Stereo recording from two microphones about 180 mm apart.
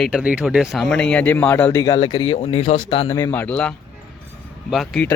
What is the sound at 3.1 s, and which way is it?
Speech, 15° left (ahead or behind).